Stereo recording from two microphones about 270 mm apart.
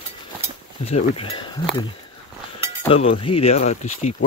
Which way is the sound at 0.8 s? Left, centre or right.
Left.